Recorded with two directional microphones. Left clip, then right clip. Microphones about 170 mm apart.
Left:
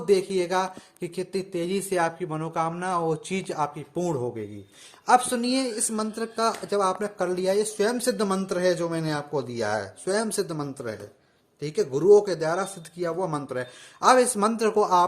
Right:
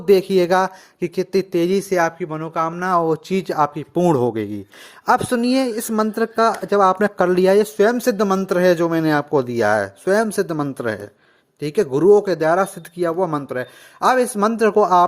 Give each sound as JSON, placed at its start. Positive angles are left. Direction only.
{"t": 0.0, "sound": "speech", "side_deg": -55}
{"t": 1.9, "sound": "speech", "side_deg": -30}
{"t": 2.8, "sound": "speech", "side_deg": -40}
{"t": 5.0, "sound": "speech", "side_deg": -40}